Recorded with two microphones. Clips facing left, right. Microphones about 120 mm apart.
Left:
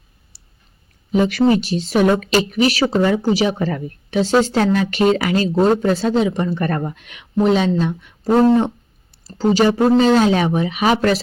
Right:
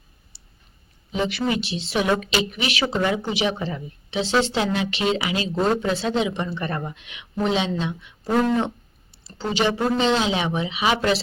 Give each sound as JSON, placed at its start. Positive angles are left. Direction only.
{"t": 1.1, "sound": "speech", "side_deg": 45}
{"t": 3.7, "sound": "speech", "side_deg": 60}
{"t": 8.4, "sound": "speech", "side_deg": 35}